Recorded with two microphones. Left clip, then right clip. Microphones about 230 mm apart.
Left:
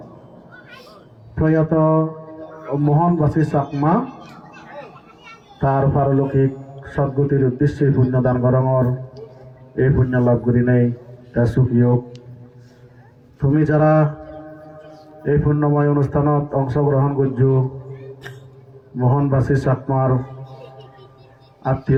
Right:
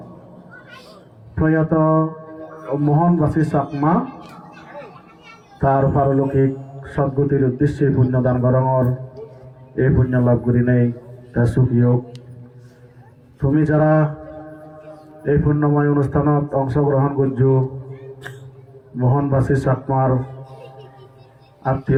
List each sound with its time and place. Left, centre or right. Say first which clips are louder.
1.4 s a man's voice: even; left
5.5 s a man's voice: right 2 dB; left
13.4 s a man's voice: left 1 dB; left
18.9 s a man's voice: even; left
21.6 s a man's voice: even; left